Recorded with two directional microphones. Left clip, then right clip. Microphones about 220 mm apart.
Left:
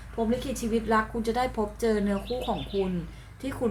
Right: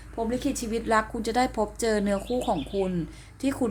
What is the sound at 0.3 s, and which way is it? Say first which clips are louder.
A woman's voice: even; 40° right (ahead or behind).